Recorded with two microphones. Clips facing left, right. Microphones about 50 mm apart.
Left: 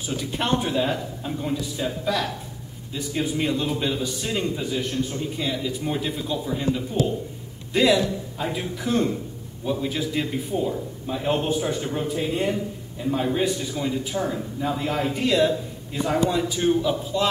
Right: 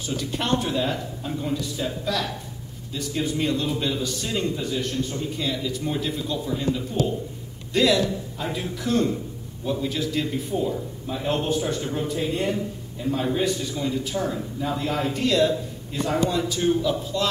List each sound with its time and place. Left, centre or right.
0.0 s a man's voice: centre